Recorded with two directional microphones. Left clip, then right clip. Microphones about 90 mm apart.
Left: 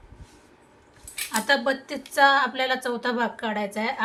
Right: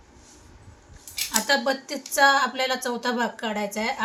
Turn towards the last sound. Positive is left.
turn(degrees=-5)  # may be behind; listen again after turning